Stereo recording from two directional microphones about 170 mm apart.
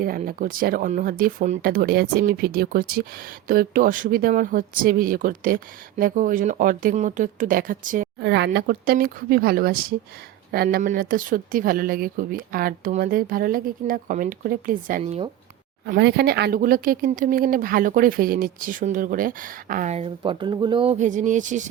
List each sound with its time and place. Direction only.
0.0 s speech: 55° right (ahead or behind)
8.2 s speech: 85° right; by 15.1 s 55° right (ahead or behind)
16.0 s speech: 70° right (ahead or behind); by 20.1 s 45° right (ahead or behind)
20.2 s speech: 25° right (ahead or behind); by 21.7 s 45° right (ahead or behind)